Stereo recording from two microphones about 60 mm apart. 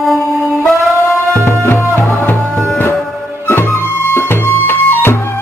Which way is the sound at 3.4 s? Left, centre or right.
Left.